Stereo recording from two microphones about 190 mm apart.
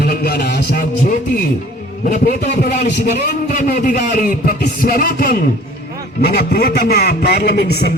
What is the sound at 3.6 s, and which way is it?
A man's voice, 45° left (ahead or behind).